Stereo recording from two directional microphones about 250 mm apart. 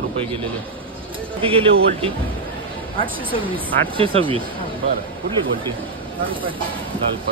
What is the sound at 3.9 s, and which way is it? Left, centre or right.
Speech, right.